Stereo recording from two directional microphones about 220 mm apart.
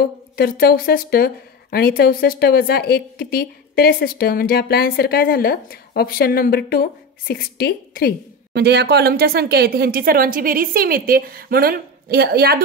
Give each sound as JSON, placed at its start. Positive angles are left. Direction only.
{"t": 0.0, "sound": "a woman's voice", "side_deg": 45}
{"t": 8.5, "sound": "speech", "side_deg": -50}